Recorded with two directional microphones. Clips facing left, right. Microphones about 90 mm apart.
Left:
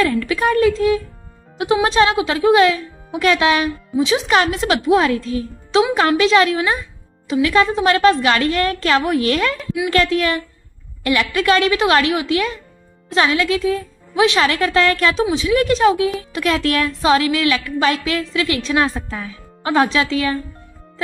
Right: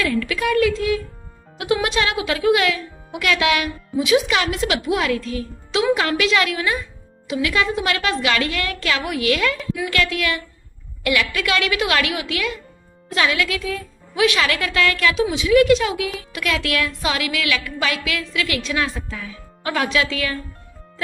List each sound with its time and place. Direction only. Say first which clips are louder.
0.0 s a woman's voice: left 4 dB; 35° left (ahead or behind)